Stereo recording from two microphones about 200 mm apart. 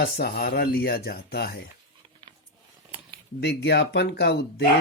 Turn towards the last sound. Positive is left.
turn(degrees=55)  # may be behind; listen again after turning